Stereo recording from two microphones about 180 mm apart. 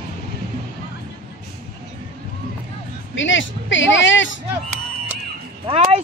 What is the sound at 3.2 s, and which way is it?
Speech, 90° left.